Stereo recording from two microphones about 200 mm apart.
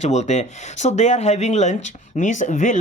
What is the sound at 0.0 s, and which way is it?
Speech, 35° left (ahead or behind).